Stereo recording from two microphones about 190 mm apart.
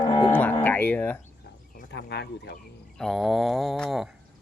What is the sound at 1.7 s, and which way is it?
Speech, 55° left (ahead or behind).